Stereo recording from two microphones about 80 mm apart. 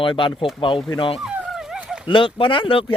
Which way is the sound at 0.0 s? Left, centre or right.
Left.